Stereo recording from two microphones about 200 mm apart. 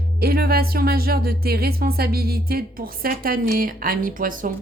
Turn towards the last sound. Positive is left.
turn(degrees=-45)  # may be behind; listen again after turning